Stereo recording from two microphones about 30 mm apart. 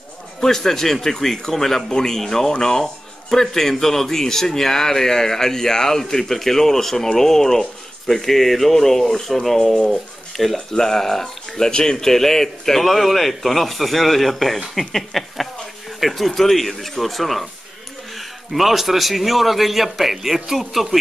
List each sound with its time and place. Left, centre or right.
0.4 s speech: centre
1.9 s speech: left
2.1 s speech: centre
6.3 s speech: centre
10.7 s speech: centre
11.7 s speech: left; by 21.0 s centre